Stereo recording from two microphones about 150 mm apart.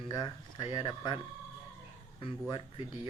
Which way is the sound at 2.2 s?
35° left (ahead or behind).